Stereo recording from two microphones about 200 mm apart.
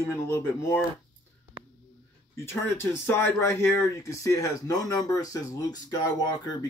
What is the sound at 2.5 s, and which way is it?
Speech, 15° left (ahead or behind).